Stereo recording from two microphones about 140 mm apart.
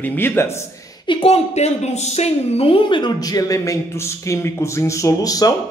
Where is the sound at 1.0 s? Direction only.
40° left (ahead or behind).